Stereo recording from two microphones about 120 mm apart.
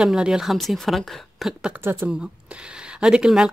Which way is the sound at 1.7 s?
20° right (ahead or behind).